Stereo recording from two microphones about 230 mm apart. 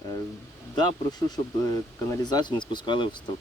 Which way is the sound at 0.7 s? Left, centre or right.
Centre.